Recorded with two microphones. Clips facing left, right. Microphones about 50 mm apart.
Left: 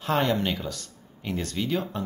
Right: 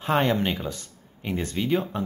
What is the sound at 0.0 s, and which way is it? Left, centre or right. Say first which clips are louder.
Speech: right 2 dB; right.